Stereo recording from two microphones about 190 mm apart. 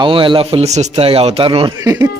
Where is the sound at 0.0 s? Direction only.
25° right (ahead or behind).